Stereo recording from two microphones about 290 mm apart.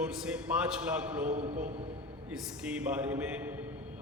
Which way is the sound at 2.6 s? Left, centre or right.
Centre.